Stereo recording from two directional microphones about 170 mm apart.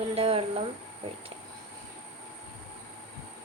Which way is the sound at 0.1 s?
35° right (ahead or behind).